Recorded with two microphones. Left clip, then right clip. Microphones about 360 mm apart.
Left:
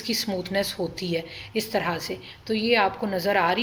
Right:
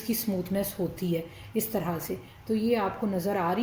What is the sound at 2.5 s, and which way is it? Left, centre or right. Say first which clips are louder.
Speech: left 6 dB; left.